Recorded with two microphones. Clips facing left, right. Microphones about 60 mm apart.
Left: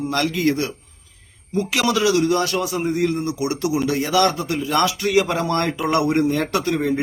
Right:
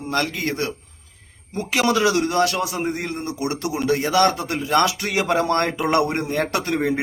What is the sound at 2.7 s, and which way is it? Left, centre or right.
A man's voice, right.